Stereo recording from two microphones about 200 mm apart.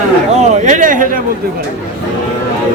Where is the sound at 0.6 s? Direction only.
40° right (ahead or behind).